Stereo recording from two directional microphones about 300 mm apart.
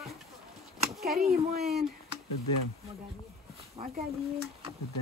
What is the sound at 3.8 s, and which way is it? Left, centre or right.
Speech, centre.